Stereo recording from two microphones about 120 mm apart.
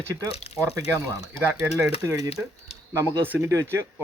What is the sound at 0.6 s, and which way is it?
Speech, 20° right (ahead or behind).